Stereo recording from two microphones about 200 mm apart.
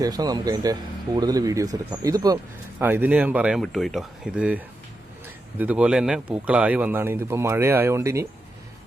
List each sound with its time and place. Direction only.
0.0 s speech: 20° right (ahead or behind)